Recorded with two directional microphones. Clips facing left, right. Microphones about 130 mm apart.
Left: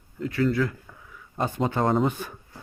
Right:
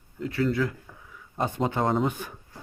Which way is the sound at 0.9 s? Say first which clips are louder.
Even; 15° right (ahead or behind).